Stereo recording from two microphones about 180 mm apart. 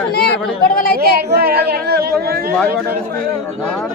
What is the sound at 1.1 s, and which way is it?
Speech, 60° right (ahead or behind).